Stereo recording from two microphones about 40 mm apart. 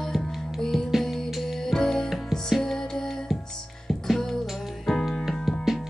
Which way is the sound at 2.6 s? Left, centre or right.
Centre.